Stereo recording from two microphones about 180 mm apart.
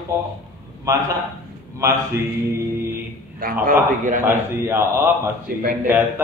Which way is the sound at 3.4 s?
55° right (ahead or behind).